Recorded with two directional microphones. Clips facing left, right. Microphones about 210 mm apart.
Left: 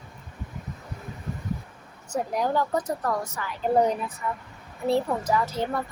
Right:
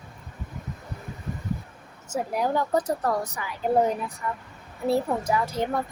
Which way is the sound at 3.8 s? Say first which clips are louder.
Left 1 dB; centre (ahead or behind).